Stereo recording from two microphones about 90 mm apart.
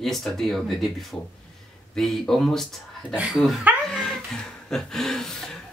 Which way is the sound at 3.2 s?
15° right (ahead or behind).